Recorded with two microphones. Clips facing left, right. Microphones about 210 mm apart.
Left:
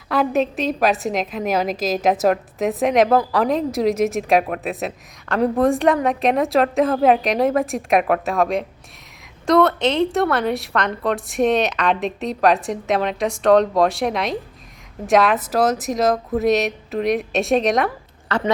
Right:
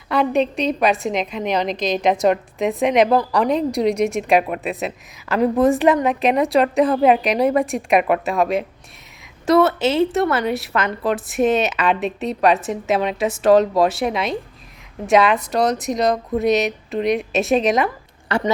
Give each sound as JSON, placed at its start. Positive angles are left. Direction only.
{"t": 0.1, "sound": "a woman's voice", "side_deg": 0}